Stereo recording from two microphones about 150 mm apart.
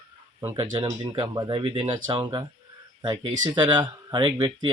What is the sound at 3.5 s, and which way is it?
Speech, 25° right (ahead or behind).